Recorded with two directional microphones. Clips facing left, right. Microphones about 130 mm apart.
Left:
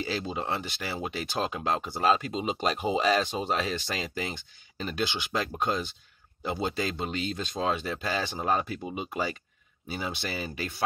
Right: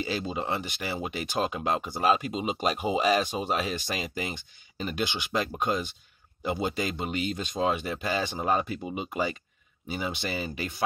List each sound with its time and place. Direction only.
0.0 s speech: 15° right (ahead or behind)